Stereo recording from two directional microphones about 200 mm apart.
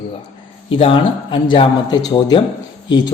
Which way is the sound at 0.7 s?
25° left (ahead or behind).